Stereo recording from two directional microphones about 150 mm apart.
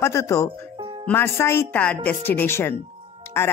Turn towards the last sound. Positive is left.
turn(degrees=15)  # may be behind; listen again after turning